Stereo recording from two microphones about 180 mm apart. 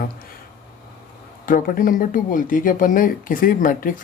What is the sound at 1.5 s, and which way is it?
Speech, 50° left (ahead or behind).